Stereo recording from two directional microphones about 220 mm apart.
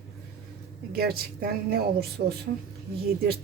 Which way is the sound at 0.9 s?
45° right (ahead or behind).